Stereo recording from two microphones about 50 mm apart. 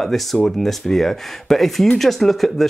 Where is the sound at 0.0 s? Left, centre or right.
Centre.